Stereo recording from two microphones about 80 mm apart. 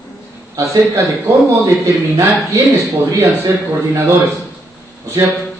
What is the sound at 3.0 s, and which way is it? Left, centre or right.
A man's voice, right.